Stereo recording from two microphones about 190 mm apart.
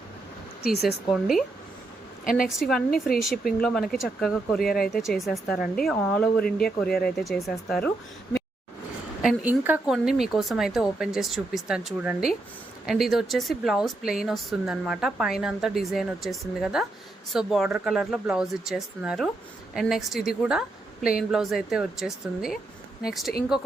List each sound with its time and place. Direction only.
0.6 s speech: 55° left (ahead or behind)
1.1 s speech: centre (ahead or behind)
2.2 s a woman's voice: 50° left (ahead or behind)
2.6 s speech: centre (ahead or behind)
4.7 s speech: 50° left (ahead or behind)
5.0 s speech: centre (ahead or behind)
6.4 s speech: 50° left (ahead or behind)
7.2 s speech: centre (ahead or behind)
9.2 s speech: 10° right (ahead or behind)